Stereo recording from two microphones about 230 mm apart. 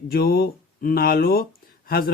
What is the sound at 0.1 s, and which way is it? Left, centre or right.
Speech, left.